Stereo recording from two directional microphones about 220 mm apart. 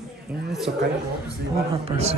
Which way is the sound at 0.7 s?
35° right (ahead or behind).